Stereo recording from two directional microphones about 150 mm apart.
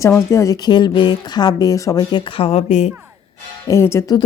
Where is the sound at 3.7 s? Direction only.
15° left (ahead or behind).